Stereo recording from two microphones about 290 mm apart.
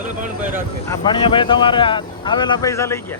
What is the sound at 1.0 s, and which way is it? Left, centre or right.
Speech, centre.